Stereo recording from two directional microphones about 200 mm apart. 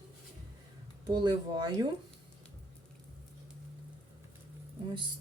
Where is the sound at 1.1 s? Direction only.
20° right (ahead or behind).